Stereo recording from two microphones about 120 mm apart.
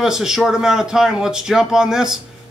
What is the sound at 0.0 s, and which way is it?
Speech, 5° right (ahead or behind).